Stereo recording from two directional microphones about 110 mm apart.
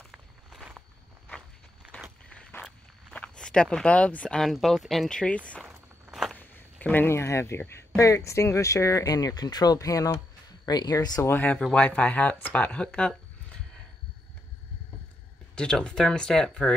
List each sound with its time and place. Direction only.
0.0 s walk: centre (ahead or behind)
1.9 s walk: 10° left (ahead or behind)
2.2 s a sound: 10° left (ahead or behind)
3.1 s speech: 10° left (ahead or behind)
6.0 s walk: 5° right (ahead or behind)
6.3 s speech: 15° left (ahead or behind); by 11.2 s 35° left (ahead or behind)
11.2 s speech: 20° left (ahead or behind)
15.5 s speech: 10° left (ahead or behind)